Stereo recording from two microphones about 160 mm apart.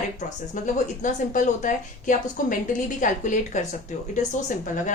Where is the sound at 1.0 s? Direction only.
50° left (ahead or behind).